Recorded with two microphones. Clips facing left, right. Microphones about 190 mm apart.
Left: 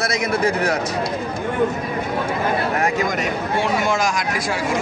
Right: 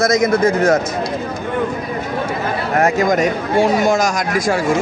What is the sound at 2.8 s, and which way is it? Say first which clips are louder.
Speech: right 6 dB; 45° right (ahead or behind).